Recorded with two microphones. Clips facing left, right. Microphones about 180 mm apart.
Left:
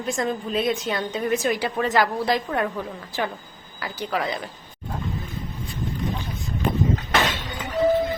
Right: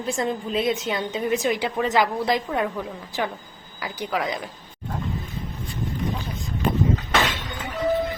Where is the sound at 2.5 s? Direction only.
Centre (ahead or behind).